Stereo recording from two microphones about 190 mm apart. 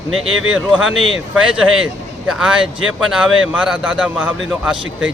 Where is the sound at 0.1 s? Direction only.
90° right.